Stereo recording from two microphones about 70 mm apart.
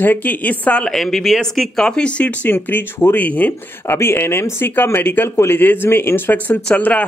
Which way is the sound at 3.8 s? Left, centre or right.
Left.